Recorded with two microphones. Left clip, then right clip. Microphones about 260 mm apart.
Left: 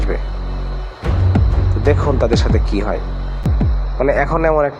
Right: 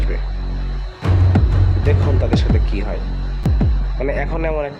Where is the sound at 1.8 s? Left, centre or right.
Centre.